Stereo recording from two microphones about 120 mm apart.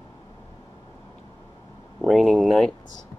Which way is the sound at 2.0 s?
Centre (ahead or behind).